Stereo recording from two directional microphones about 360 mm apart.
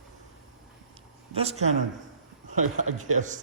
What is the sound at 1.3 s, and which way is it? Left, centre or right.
Speech, centre.